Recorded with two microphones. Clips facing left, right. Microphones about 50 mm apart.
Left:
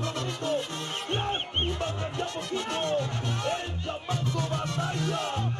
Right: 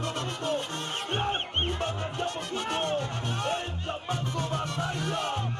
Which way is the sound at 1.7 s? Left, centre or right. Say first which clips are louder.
Even; right.